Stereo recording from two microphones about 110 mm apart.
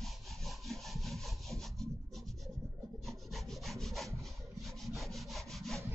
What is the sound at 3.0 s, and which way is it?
Wood, centre (ahead or behind).